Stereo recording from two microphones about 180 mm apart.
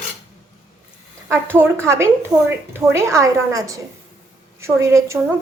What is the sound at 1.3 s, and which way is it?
A woman's voice, 10° right (ahead or behind).